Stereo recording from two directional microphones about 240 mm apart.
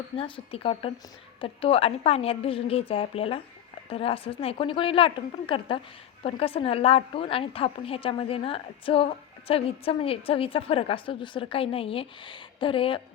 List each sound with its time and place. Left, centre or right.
0.2 s a woman's voice: left